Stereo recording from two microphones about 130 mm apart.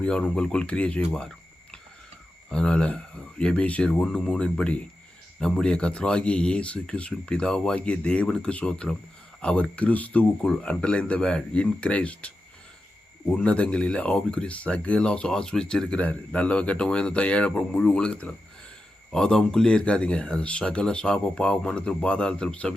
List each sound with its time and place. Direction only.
0.0 s speech: 5° left (ahead or behind)
2.5 s speech: 5° left (ahead or behind)